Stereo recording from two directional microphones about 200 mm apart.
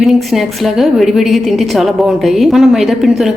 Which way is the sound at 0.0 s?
Centre (ahead or behind).